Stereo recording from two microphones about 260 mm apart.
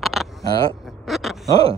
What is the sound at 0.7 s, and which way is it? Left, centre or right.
Speech, centre.